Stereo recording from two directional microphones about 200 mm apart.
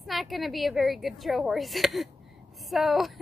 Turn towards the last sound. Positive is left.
turn(degrees=0)  # may be behind; listen again after turning